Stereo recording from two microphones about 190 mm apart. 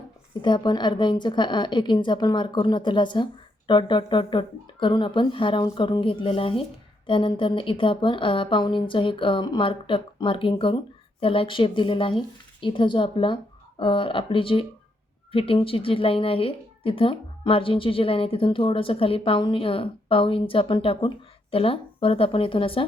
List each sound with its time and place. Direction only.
0.4 s a woman's voice: 25° left (ahead or behind)